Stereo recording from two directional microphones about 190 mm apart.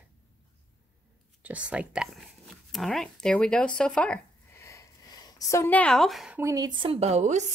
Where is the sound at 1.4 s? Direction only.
5° right (ahead or behind).